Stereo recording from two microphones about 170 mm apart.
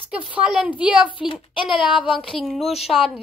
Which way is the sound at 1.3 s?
30° left (ahead or behind).